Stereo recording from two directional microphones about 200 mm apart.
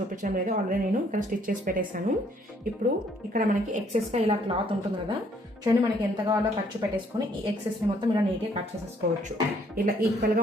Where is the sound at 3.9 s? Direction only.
35° right (ahead or behind).